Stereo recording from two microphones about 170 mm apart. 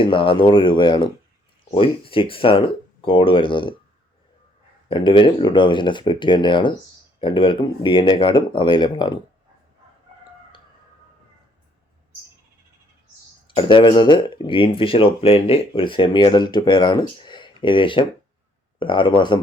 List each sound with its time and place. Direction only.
0.0 s speech: 30° left (ahead or behind)
4.9 s speech: 30° left (ahead or behind)
13.6 s speech: 30° left (ahead or behind)